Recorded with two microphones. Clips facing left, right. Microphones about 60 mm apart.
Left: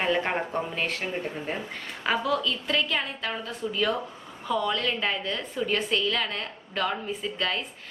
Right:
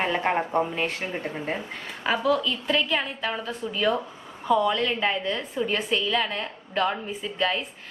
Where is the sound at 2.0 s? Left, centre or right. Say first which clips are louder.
Right 2 dB; centre.